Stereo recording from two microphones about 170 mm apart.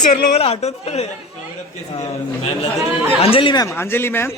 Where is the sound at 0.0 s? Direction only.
45° left (ahead or behind).